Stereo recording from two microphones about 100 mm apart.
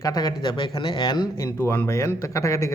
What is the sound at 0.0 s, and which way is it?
A man's voice, 40° left (ahead or behind).